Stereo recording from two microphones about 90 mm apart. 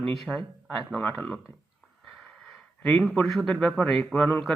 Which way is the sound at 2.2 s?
10° left (ahead or behind).